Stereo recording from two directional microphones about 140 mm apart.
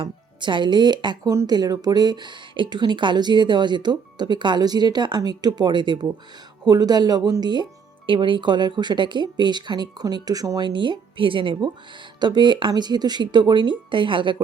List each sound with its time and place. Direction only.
0.0 s speech: 35° right (ahead or behind)